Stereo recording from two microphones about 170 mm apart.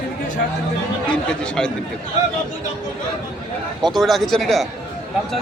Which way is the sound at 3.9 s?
Centre (ahead or behind).